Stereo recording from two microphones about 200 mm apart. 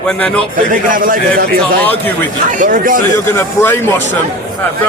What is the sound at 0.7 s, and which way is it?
Speech, 40° right (ahead or behind).